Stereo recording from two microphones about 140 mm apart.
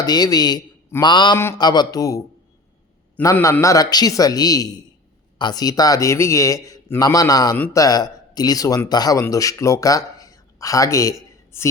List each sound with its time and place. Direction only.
0.0 s a man's voice: 30° left (ahead or behind)
1.0 s mantra: 35° left (ahead or behind)
1.5 s a man's voice: 30° left (ahead or behind)